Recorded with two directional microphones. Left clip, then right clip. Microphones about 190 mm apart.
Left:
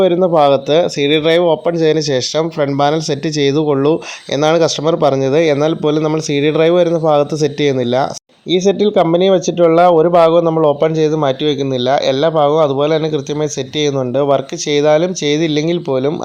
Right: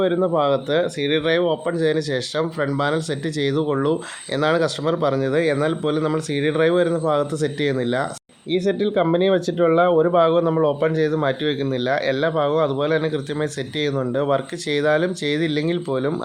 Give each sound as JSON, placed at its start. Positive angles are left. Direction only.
{"t": 0.0, "sound": "speech", "side_deg": 30}
{"t": 14.2, "sound": "speech", "side_deg": 25}